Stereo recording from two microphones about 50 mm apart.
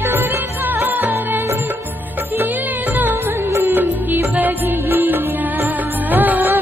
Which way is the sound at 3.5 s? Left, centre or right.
Right.